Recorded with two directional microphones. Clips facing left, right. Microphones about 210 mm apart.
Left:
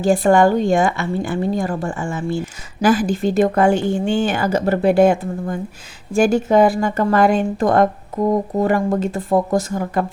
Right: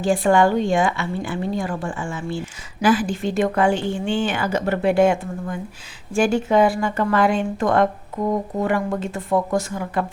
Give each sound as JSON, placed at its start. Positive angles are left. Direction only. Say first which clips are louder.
{"t": 0.0, "sound": "a woman's voice", "louder": "left 3 dB", "side_deg": 40}